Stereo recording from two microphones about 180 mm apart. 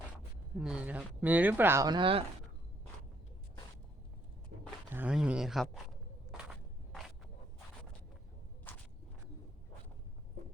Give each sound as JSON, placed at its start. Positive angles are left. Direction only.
{"t": 0.6, "sound": "speech", "side_deg": -5}
{"t": 4.5, "sound": "a sound", "side_deg": -70}
{"t": 4.9, "sound": "speech", "side_deg": -10}
{"t": 8.7, "sound": "walk", "side_deg": 10}